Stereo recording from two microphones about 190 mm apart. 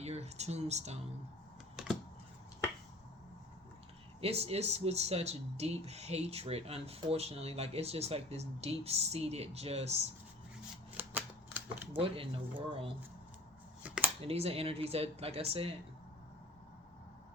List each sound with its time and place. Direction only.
0.0 s speech: 35° right (ahead or behind)
4.2 s speech: 30° right (ahead or behind)
10.9 s a sound: 10° right (ahead or behind)
11.9 s speech: 30° right (ahead or behind)
13.8 s a sound: 5° right (ahead or behind)
14.2 s speech: 30° right (ahead or behind)